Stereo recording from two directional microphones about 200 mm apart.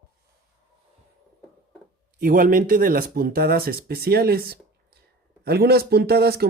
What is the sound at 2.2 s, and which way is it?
Speech, 45° right (ahead or behind).